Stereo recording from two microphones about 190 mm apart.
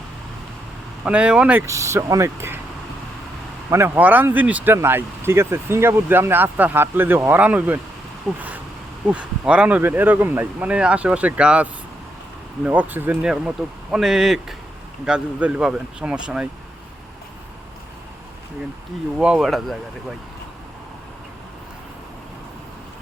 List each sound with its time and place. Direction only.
1.0 s speech: 5° right (ahead or behind)
3.7 s speech: 10° right (ahead or behind)
8.3 s speech: 5° left (ahead or behind)
19.2 s speech: 5° right (ahead or behind)